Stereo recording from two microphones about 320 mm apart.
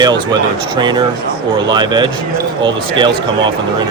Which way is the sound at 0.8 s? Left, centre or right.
Centre.